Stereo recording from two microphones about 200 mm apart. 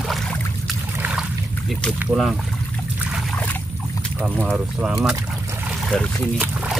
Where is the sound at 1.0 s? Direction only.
5° right (ahead or behind).